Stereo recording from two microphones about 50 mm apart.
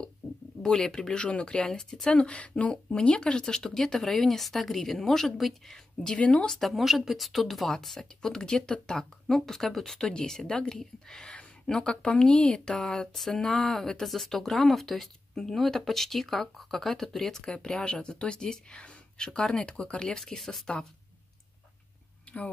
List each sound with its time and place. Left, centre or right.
0.6 s speech: centre
1.7 s speech: centre
2.1 s speech: left; by 6.1 s centre
6.1 s speech: left
6.5 s speech: centre